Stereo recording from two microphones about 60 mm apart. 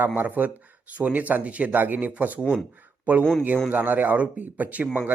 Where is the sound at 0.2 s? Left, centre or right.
Right.